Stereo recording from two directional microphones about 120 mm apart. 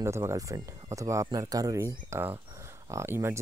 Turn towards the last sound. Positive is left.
turn(degrees=-20)  # may be behind; listen again after turning